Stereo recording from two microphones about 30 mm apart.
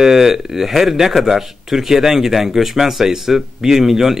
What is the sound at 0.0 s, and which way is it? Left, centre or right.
Speech, centre.